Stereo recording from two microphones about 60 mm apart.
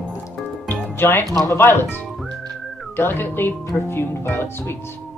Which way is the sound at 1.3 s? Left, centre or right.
Left.